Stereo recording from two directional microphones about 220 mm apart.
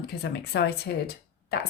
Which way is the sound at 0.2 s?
50° left (ahead or behind).